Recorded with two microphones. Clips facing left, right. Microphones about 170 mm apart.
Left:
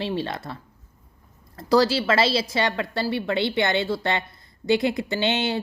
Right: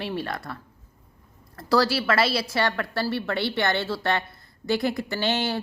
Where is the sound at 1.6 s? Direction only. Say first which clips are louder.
Left 3 dB; 20° left (ahead or behind).